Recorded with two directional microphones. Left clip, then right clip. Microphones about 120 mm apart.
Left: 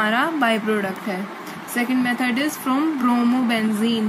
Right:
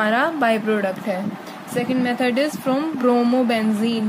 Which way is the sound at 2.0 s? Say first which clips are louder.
Right 2 dB; 55° right (ahead or behind).